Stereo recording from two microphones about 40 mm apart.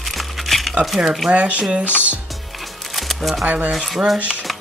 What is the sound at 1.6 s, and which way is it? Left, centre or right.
Speech, right.